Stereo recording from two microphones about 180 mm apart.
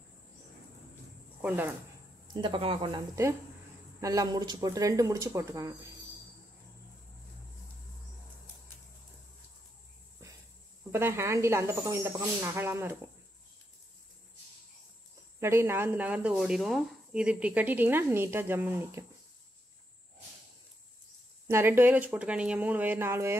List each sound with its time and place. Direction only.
2.3 s speech: 25° right (ahead or behind)
4.0 s speech: 20° right (ahead or behind)
10.9 s speech: 15° right (ahead or behind)
15.4 s speech: 15° right (ahead or behind)
21.5 s speech: 15° right (ahead or behind)